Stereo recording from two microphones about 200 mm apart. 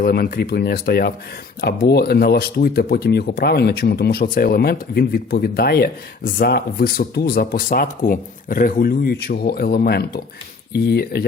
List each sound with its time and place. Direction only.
0.0 s speech: 45° left (ahead or behind)